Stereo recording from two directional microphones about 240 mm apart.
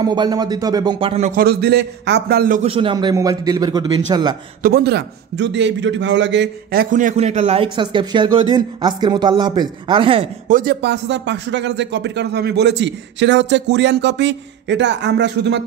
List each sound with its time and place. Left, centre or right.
0.0 s a man's voice: centre
4.6 s a man's voice: right
10.5 s speech: right